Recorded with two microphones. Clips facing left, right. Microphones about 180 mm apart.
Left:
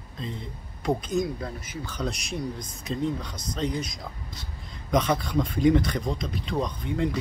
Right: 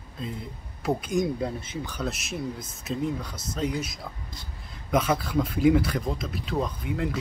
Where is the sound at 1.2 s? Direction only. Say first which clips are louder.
Right 2 dB; 25° right (ahead or behind).